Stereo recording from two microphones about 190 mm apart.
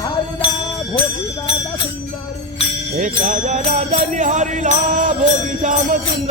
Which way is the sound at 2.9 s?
45° right (ahead or behind).